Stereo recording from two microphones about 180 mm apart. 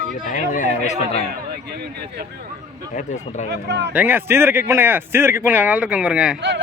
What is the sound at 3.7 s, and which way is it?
Speech, 70° right (ahead or behind).